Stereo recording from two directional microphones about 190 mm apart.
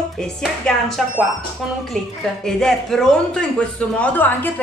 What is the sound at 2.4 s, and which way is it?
A woman's voice, 5° left (ahead or behind).